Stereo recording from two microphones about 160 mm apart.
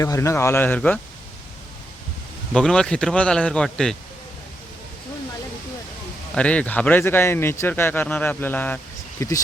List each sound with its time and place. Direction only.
0.0 s speech: 20° left (ahead or behind)
2.5 s speech: 5° left (ahead or behind)
6.3 s speech: 5° left (ahead or behind)